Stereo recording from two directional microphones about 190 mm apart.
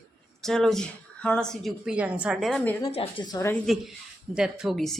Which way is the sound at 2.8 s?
30° left (ahead or behind).